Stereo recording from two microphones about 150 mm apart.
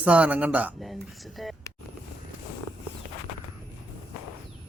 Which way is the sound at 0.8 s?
Centre (ahead or behind).